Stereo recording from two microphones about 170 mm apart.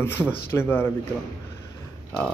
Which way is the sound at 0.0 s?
15° left (ahead or behind).